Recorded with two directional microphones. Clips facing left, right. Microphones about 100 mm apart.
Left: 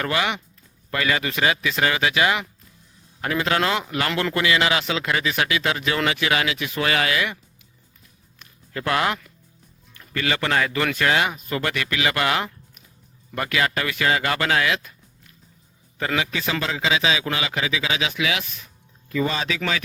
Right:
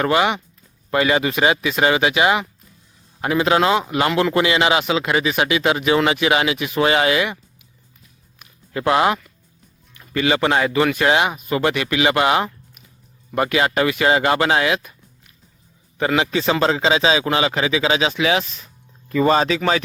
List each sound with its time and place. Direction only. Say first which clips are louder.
0.0 s speech: right 6 dB; 25° right (ahead or behind)
8.4 s a sound: right 5 dB; 20° right (ahead or behind)
9.9 s a man's voice: right 6 dB; 15° right (ahead or behind); by 18.6 s 35° right (ahead or behind)
19.0 s a man's voice: right 8 dB; 45° right (ahead or behind)